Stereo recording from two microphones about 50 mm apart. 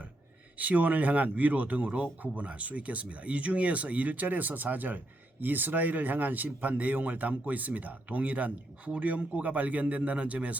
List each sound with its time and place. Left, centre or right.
0.6 s speech: right